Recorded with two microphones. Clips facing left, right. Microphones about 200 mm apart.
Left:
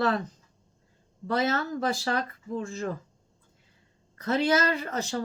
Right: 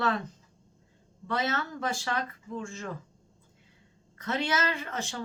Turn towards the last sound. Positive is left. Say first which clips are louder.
# left 5 dB
turn(degrees=40)  # may be behind; listen again after turning